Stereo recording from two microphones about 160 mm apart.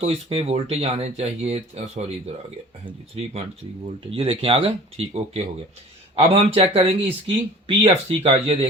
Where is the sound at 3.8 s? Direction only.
35° right (ahead or behind).